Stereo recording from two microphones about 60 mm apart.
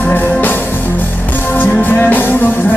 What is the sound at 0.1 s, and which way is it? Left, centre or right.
Music, left.